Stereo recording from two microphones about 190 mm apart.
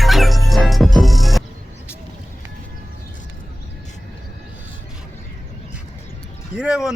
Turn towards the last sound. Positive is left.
turn(degrees=-5)  # may be behind; listen again after turning